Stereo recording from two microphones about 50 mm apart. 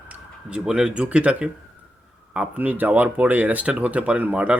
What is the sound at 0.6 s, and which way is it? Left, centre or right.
Speech, centre.